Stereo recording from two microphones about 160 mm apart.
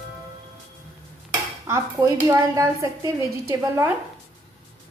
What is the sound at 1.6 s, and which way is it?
A woman's voice, 15° right (ahead or behind).